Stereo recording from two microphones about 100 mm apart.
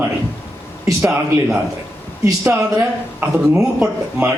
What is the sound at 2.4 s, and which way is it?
Speech, 20° right (ahead or behind).